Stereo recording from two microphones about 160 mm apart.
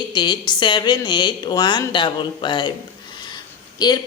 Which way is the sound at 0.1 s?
25° left (ahead or behind).